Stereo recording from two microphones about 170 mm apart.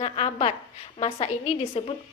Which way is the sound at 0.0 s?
35° left (ahead or behind).